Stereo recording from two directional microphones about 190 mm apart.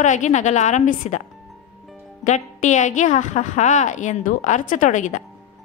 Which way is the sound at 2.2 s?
40° left (ahead or behind).